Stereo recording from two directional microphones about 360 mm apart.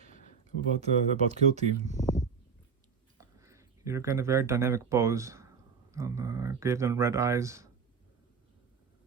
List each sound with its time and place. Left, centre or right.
0.8 s speech: centre
1.9 s a sound: centre
3.2 s speech: centre